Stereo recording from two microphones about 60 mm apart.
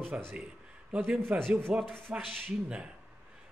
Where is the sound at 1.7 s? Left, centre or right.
Centre.